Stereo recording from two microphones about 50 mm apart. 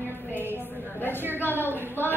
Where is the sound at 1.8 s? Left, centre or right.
Right.